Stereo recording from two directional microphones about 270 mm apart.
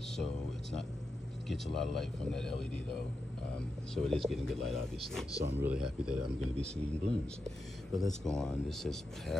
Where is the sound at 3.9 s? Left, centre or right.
Centre.